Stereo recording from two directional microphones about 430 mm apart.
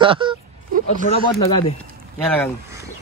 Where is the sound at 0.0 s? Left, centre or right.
Centre.